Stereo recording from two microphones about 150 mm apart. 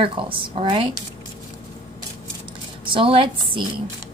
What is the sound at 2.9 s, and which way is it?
Speech, 35° right (ahead or behind).